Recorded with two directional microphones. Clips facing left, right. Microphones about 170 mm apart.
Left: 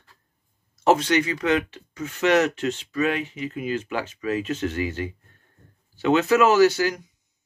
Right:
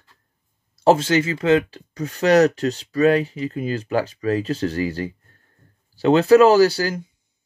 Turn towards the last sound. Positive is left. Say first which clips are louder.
# right 1 dB
turn(degrees=-30)  # may be behind; listen again after turning